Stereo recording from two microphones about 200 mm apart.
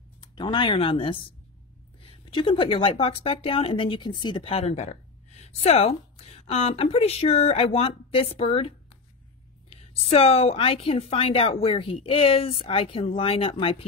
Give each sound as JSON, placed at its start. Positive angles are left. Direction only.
{"t": 0.2, "sound": "a woman's voice", "side_deg": 25}